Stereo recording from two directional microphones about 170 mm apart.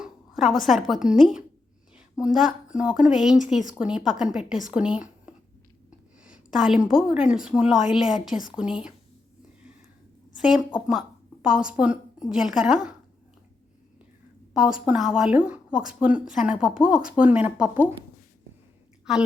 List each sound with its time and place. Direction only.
0.0 s a woman's voice: centre (ahead or behind)
10.3 s a woman's voice: 5° right (ahead or behind)
14.5 s a woman's voice: 5° right (ahead or behind)